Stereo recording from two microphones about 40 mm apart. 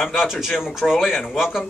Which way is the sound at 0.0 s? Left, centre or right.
Centre.